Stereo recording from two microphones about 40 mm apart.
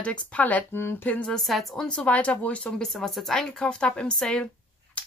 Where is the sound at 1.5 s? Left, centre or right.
Centre.